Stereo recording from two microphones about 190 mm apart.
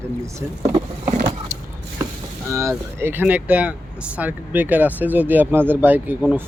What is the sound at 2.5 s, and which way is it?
Speech, 15° right (ahead or behind).